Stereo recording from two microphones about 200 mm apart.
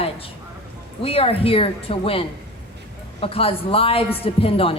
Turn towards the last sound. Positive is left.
turn(degrees=30)  # may be behind; listen again after turning